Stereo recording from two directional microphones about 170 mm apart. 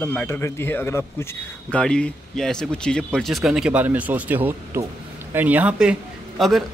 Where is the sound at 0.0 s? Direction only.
10° left (ahead or behind).